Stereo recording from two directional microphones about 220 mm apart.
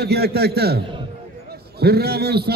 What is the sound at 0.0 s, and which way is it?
A man's voice, 45° right (ahead or behind).